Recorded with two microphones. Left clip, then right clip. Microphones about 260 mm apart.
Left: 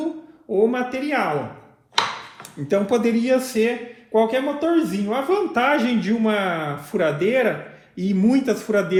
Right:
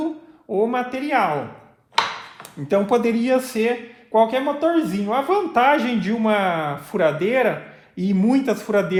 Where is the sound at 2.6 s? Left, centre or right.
Right.